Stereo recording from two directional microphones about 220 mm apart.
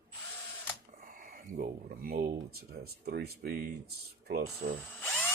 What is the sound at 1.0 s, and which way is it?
Speech, 40° right (ahead or behind).